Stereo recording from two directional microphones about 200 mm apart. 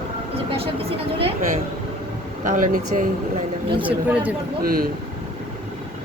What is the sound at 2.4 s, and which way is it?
Speech, 40° right (ahead or behind).